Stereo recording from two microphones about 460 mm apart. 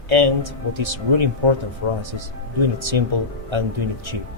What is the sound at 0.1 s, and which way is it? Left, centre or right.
A man's voice, right.